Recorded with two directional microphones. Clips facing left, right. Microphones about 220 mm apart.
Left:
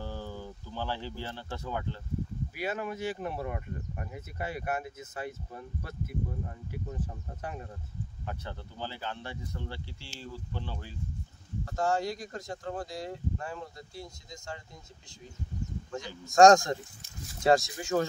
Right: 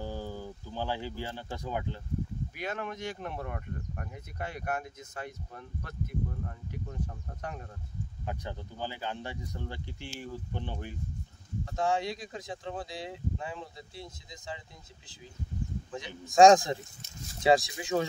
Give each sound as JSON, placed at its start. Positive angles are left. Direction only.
{"t": 0.0, "sound": "a sound", "side_deg": -15}
{"t": 2.5, "sound": "speech", "side_deg": 5}
{"t": 8.3, "sound": "speech", "side_deg": -15}
{"t": 11.7, "sound": "speech", "side_deg": 0}
{"t": 16.3, "sound": "speech", "side_deg": 0}